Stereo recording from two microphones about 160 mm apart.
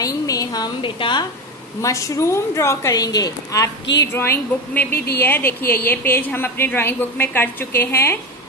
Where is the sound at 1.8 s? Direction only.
20° left (ahead or behind).